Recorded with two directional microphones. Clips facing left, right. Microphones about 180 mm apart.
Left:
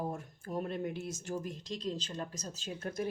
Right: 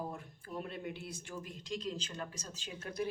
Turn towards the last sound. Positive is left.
turn(degrees=45)  # may be behind; listen again after turning